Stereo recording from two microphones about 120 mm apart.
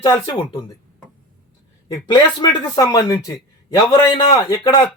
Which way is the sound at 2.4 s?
35° left (ahead or behind).